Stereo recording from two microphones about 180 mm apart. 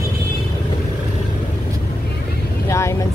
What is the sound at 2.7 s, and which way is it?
Speech, 15° left (ahead or behind).